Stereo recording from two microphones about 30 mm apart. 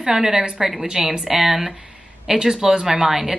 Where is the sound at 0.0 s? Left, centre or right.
Centre.